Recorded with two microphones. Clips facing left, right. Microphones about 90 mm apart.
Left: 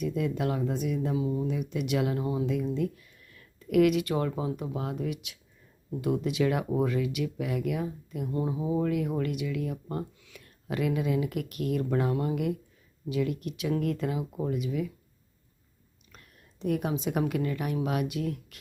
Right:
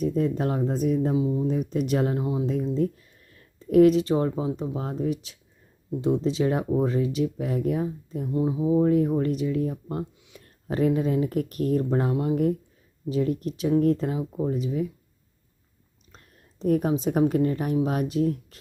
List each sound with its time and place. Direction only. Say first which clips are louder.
0.0 s speech: right 5 dB; 35° right (ahead or behind)
1.1 s speech: right 5 dB; 20° right (ahead or behind)
1.5 s speech: right 5 dB; 40° right (ahead or behind)
2.1 s speech: right 3 dB; 25° right (ahead or behind)
2.5 s speech: right 4 dB; 35° right (ahead or behind)
8.3 s speech: right 7 dB; 15° right (ahead or behind)
8.8 s speech: right 8 dB; 35° right (ahead or behind)
9.9 s a sound: right 3 dB; 20° right (ahead or behind)
10.4 s speech: right 6 dB; 35° right (ahead or behind)
16.1 s a woman's voice: right 3 dB; 35° right (ahead or behind)